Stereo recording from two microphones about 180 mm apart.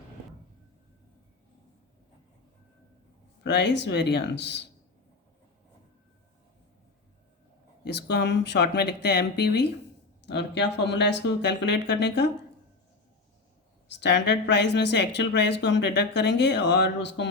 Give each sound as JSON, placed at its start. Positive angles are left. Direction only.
{"t": 3.4, "sound": "speech", "side_deg": 75}
{"t": 7.9, "sound": "speech", "side_deg": 70}
{"t": 13.9, "sound": "speech", "side_deg": 70}